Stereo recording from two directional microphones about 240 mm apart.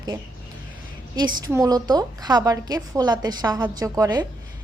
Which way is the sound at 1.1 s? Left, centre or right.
Centre.